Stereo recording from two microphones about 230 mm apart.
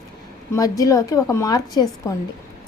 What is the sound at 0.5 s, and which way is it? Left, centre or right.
A woman's voice, centre.